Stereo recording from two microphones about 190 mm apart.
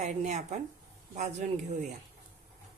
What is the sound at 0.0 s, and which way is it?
Speech, 40° right (ahead or behind).